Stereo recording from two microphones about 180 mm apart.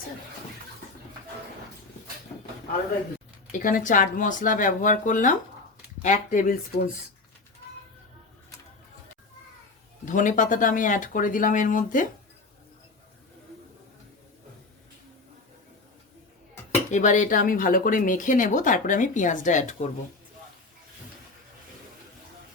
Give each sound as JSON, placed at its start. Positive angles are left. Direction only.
{"t": 3.6, "sound": "speech", "side_deg": 50}
{"t": 10.1, "sound": "speech", "side_deg": 45}
{"t": 16.9, "sound": "speech", "side_deg": 45}